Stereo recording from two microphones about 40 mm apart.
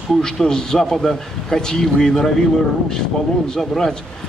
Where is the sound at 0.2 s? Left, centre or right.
Centre.